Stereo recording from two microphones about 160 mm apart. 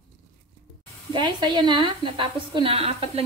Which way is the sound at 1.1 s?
25° right (ahead or behind).